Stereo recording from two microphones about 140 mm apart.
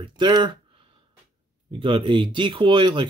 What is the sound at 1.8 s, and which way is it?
Speech, 40° right (ahead or behind).